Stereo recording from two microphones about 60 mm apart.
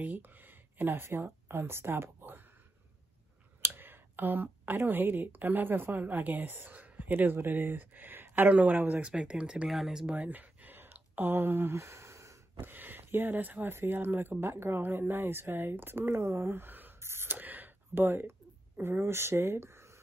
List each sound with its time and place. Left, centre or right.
0.0 s speech: right
3.6 s speech: right
9.0 s speech: centre
9.7 s speech: centre
10.0 s a sound: right
12.5 s speech: right
17.0 s a sound: right
18.8 s speech: right